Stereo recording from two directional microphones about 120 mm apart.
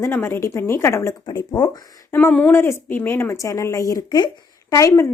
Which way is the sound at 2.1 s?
15° left (ahead or behind).